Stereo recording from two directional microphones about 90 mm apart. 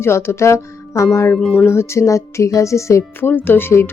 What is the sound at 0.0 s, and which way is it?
Speech, 30° left (ahead or behind).